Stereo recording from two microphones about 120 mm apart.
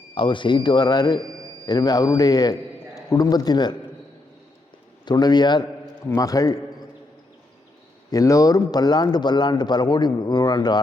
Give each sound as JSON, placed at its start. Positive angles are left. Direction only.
{"t": 0.1, "sound": "a man's voice", "side_deg": 45}
{"t": 5.0, "sound": "a man's voice", "side_deg": 35}
{"t": 8.1, "sound": "speech", "side_deg": 30}